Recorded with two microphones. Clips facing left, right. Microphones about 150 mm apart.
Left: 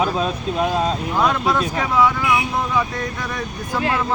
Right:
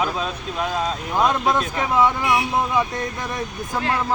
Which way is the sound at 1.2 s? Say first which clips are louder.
Even; 20° right (ahead or behind).